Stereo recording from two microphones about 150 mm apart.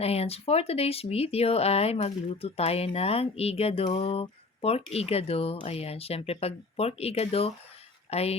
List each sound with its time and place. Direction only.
0.0 s speech: 40° left (ahead or behind)